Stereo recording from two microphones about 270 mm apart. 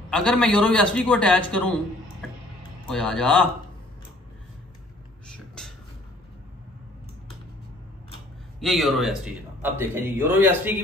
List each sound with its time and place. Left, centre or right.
0.1 s a man's voice: centre
2.9 s a man's voice: centre
8.5 s speech: centre